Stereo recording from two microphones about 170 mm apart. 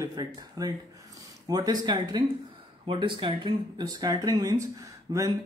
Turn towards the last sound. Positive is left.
turn(degrees=-25)  # may be behind; listen again after turning